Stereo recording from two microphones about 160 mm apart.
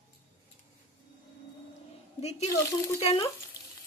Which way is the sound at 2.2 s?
40° left (ahead or behind).